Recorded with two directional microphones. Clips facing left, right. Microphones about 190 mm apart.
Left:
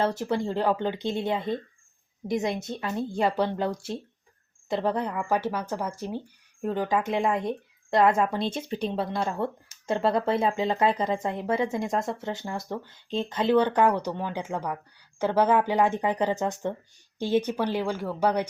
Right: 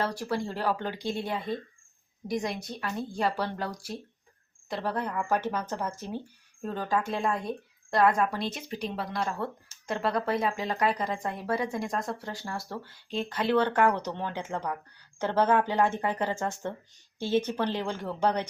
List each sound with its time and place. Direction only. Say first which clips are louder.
0.0 s speech: left 4 dB; 25° left (ahead or behind)
4.7 s speech: left 5 dB; 20° left (ahead or behind)
5.1 s speech: left 2 dB; 10° left (ahead or behind)